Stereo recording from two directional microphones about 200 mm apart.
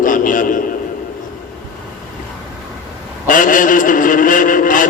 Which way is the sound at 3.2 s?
40° left (ahead or behind).